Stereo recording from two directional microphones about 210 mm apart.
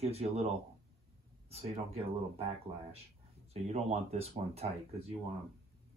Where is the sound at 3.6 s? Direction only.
30° right (ahead or behind).